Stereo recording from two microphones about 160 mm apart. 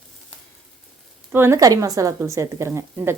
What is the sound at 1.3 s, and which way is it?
A woman's voice, 15° right (ahead or behind).